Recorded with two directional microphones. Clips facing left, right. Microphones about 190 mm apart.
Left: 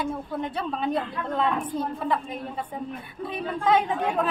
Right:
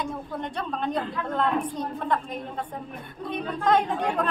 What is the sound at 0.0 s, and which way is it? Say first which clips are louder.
A woman's voice: left 2 dB; 5° left (ahead or behind).